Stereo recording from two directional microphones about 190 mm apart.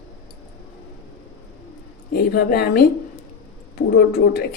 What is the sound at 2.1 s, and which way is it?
Speech, 55° left (ahead or behind).